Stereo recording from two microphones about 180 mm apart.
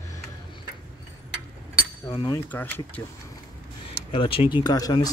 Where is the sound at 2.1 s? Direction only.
25° left (ahead or behind).